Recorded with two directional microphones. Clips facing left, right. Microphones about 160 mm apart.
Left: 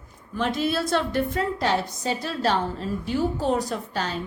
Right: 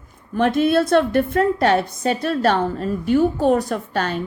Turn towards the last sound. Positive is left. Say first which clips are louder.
# right 6 dB
turn(degrees=-60)  # may be behind; listen again after turning